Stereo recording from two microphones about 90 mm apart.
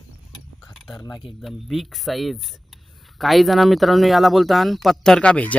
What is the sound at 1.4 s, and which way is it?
Speech, centre (ahead or behind).